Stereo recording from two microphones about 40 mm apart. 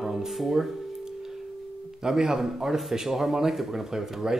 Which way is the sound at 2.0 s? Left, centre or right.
Centre.